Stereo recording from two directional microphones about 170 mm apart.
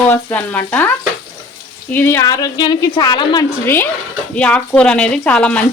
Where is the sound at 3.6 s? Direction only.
15° left (ahead or behind).